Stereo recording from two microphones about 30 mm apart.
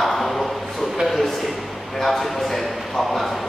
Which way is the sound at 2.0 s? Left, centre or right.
Centre.